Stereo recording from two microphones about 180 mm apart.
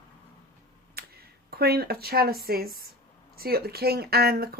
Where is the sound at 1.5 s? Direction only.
60° right (ahead or behind).